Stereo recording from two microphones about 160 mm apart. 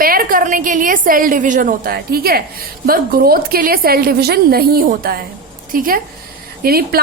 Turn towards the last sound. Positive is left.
turn(degrees=-70)  # may be behind; listen again after turning